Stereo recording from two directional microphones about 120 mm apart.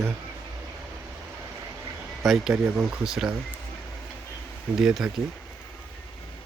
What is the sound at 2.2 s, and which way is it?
Speech, centre (ahead or behind).